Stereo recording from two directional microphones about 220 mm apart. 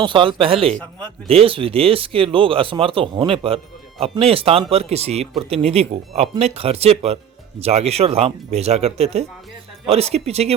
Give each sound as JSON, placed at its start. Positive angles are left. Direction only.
{"t": 0.0, "sound": "speech", "side_deg": -20}